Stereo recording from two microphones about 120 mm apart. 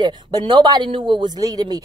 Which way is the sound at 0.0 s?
40° right (ahead or behind).